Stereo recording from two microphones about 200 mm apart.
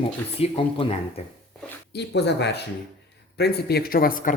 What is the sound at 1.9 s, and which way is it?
Speech, 55° left (ahead or behind).